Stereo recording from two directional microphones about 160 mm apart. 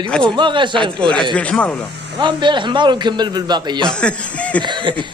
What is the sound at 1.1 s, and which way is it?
Speech, 5° left (ahead or behind).